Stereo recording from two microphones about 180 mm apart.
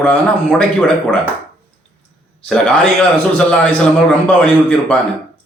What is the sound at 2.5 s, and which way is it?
Speech, 5° left (ahead or behind).